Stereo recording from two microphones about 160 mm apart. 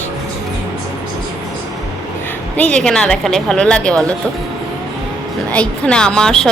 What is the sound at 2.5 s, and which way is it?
Speech, 5° left (ahead or behind).